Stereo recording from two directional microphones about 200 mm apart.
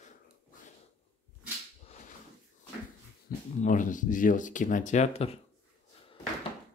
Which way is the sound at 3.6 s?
40° left (ahead or behind).